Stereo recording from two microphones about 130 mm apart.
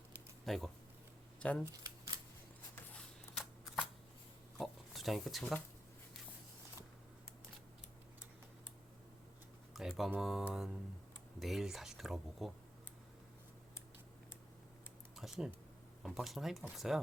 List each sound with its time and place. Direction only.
0.4 s speech: centre (ahead or behind)
1.6 s scissors: 25° right (ahead or behind)
2.7 s a sound: 10° left (ahead or behind)
4.5 s a sound: centre (ahead or behind)
9.7 s speech: centre (ahead or behind)
15.1 s typing: centre (ahead or behind)
16.0 s speech: centre (ahead or behind)